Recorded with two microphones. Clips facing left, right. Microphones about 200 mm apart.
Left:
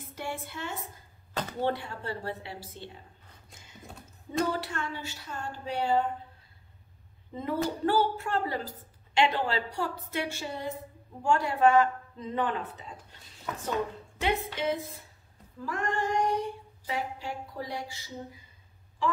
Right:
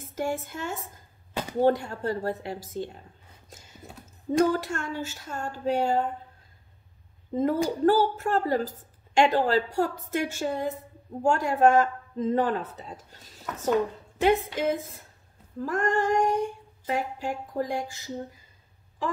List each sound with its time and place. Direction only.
0.0 s a woman's voice: 45° right (ahead or behind)
4.3 s speech: 45° right (ahead or behind)
7.3 s speech: 45° right (ahead or behind)